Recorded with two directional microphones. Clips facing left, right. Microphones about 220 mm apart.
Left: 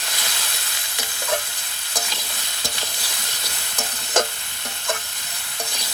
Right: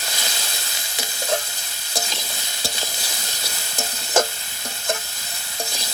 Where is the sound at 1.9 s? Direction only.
25° right (ahead or behind).